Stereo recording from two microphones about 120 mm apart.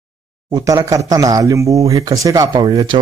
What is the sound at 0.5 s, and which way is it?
A man's voice, 30° right (ahead or behind).